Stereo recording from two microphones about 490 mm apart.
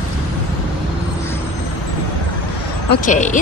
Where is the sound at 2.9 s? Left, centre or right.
Centre.